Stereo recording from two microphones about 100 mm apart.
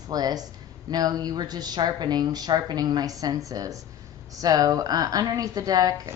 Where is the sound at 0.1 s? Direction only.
40° right (ahead or behind).